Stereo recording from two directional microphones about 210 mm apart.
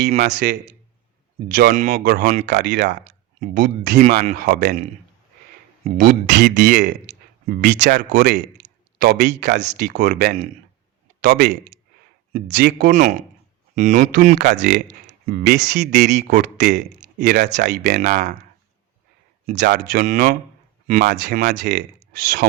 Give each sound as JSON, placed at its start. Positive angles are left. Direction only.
{"t": 0.3, "sound": "speech", "side_deg": -40}
{"t": 2.6, "sound": "speech", "side_deg": -55}
{"t": 3.0, "sound": "speech", "side_deg": -35}
{"t": 5.8, "sound": "speech", "side_deg": -45}
{"t": 12.5, "sound": "speech", "side_deg": -50}
{"t": 12.9, "sound": "speech", "side_deg": -35}
{"t": 14.3, "sound": "speech", "side_deg": -55}
{"t": 19.5, "sound": "speech", "side_deg": -55}
{"t": 21.0, "sound": "speech", "side_deg": -55}